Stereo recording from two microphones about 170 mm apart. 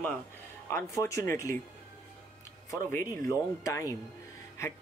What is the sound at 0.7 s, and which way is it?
Speech, 20° left (ahead or behind).